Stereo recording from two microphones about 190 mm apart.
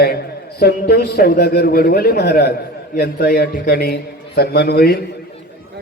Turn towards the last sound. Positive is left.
turn(degrees=55)  # may be behind; listen again after turning